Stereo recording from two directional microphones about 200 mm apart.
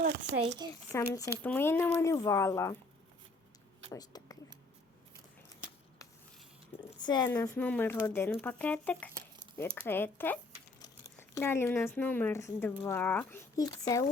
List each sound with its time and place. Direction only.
0.0 s speech: 55° right (ahead or behind)
0.9 s speech: 15° left (ahead or behind)
3.9 s speech: 20° left (ahead or behind)
7.0 s speech: 20° left (ahead or behind)